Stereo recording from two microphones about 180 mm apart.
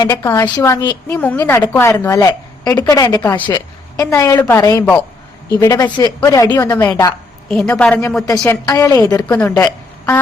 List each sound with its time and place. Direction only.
0.0 s a woman's voice: 15° left (ahead or behind)
7.4 s a woman's voice: 5° left (ahead or behind)
8.3 s a woman's voice: 15° left (ahead or behind)